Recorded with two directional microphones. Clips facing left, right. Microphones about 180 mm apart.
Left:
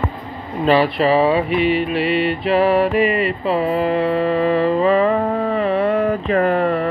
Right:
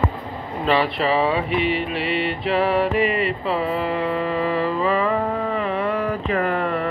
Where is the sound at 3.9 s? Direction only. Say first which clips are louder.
Left 5 dB; 30° left (ahead or behind).